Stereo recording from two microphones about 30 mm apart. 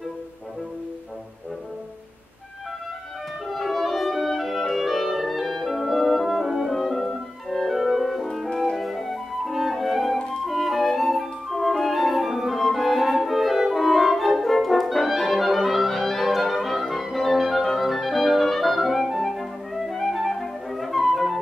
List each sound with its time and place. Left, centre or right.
3.4 s music: centre
7.7 s music: centre
8.7 s flute: centre
13.6 s brass instrument: centre
17.7 s clarinet: centre